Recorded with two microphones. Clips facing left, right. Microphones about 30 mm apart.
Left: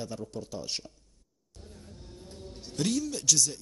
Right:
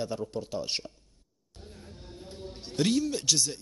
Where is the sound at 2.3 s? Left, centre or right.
Right.